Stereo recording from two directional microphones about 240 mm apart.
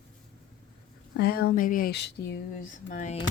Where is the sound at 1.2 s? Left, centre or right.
Left.